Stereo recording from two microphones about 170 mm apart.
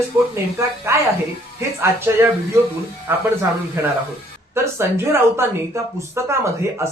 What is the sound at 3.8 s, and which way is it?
Speech, 15° right (ahead or behind).